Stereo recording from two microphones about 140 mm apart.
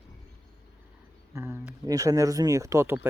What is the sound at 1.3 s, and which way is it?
Speech, 20° right (ahead or behind).